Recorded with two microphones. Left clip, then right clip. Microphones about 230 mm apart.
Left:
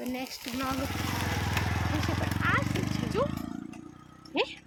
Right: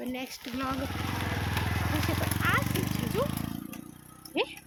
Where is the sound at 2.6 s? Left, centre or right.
Right.